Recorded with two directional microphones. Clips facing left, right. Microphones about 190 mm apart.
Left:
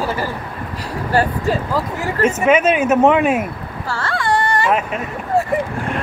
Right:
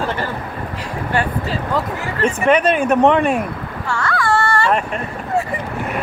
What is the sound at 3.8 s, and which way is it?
Baby cry, 30° left (ahead or behind).